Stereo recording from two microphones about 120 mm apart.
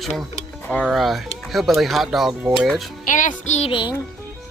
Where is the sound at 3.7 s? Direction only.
40° left (ahead or behind).